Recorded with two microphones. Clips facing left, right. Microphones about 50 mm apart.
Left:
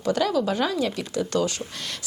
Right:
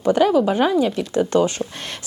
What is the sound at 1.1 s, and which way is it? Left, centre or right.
Speech, right.